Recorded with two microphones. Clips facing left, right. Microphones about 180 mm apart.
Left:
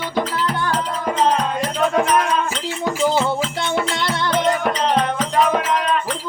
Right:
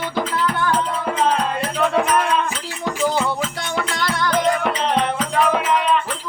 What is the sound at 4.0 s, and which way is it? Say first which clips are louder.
Music: even; 25° left (ahead or behind).